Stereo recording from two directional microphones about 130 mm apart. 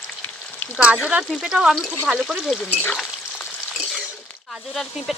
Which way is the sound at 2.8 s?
10° left (ahead or behind).